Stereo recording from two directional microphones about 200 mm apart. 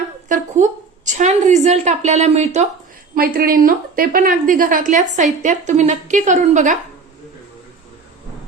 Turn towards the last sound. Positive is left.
turn(degrees=-40)  # may be behind; listen again after turning